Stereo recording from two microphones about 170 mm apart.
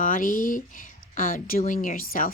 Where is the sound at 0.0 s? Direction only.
55° left (ahead or behind).